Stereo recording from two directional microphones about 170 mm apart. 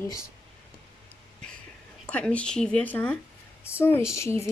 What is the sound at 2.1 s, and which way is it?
Speech, 5° left (ahead or behind).